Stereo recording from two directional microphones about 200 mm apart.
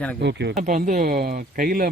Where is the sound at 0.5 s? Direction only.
40° right (ahead or behind).